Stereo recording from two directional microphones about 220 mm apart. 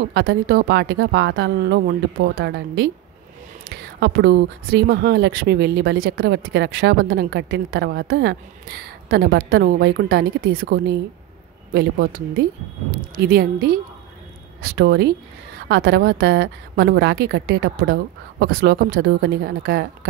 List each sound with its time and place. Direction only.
0.1 s speech: 50° right (ahead or behind)